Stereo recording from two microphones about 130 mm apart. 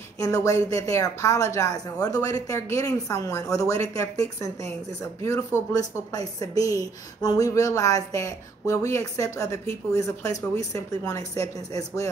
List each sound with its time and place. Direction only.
0.2 s speech: 25° left (ahead or behind)